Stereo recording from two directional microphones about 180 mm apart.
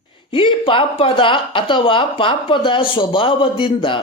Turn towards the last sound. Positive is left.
turn(degrees=30)  # may be behind; listen again after turning